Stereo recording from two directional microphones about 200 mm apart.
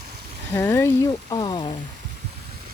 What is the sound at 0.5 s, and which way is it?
Speech, 10° left (ahead or behind).